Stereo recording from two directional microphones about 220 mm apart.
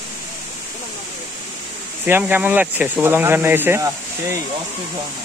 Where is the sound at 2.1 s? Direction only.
10° right (ahead or behind).